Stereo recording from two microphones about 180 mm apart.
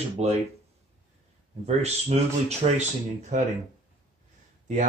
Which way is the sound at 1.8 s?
35° right (ahead or behind).